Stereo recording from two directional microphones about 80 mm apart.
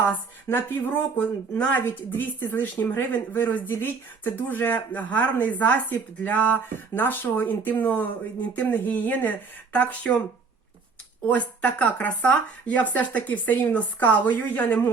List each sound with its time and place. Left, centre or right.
0.0 s speech: left